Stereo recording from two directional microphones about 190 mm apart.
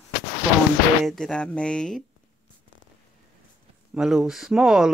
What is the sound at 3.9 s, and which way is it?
Speech, 5° right (ahead or behind).